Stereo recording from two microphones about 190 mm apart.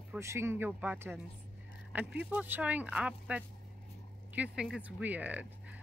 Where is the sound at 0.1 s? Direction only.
15° right (ahead or behind).